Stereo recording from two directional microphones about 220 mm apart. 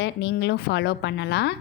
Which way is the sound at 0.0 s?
55° left (ahead or behind).